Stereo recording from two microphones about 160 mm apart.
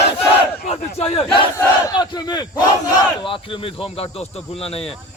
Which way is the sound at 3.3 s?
35° left (ahead or behind).